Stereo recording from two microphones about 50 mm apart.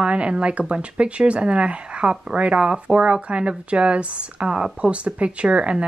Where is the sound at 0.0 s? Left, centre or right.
Right.